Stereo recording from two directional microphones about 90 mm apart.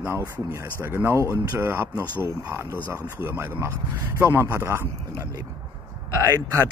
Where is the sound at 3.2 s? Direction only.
25° right (ahead or behind).